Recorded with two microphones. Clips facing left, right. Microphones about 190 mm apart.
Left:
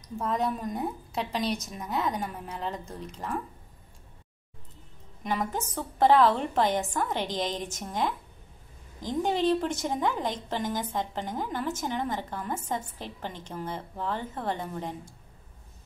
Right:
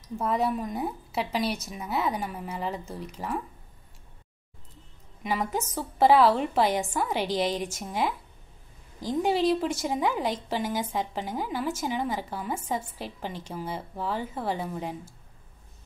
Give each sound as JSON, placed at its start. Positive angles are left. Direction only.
{"t": 0.2, "sound": "a woman's voice", "side_deg": -10}
{"t": 5.2, "sound": "a woman's voice", "side_deg": -10}